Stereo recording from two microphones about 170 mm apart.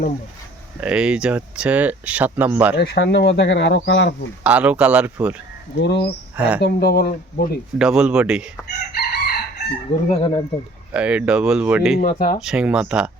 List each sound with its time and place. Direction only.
0.8 s speech: 5° right (ahead or behind)
2.7 s speech: 75° left (ahead or behind)
4.4 s speech: 10° right (ahead or behind)
5.8 s speech: 90° left
6.3 s speech: 10° right (ahead or behind)
6.6 s speech: 65° left (ahead or behind)
7.8 s speech: 5° right (ahead or behind)
8.9 s chicken: 65° left (ahead or behind)
10.1 s speech: 35° left (ahead or behind)
10.9 s speech: 5° right (ahead or behind)
11.9 s speech: 55° left (ahead or behind)
12.4 s speech: 5° right (ahead or behind)